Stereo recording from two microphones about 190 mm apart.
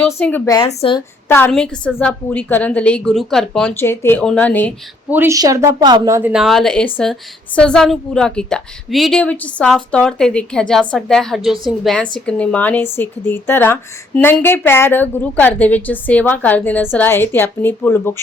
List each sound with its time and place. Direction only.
0.1 s a woman's voice: 10° left (ahead or behind)
0.7 s a woman's voice: 30° left (ahead or behind)
1.3 s a woman's voice: 10° left (ahead or behind)
5.1 s a woman's voice: 15° right (ahead or behind)
6.3 s a woman's voice: centre (ahead or behind)